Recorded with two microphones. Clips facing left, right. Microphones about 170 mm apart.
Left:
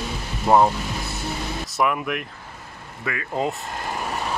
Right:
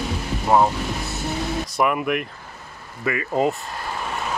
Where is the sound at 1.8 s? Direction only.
5° right (ahead or behind).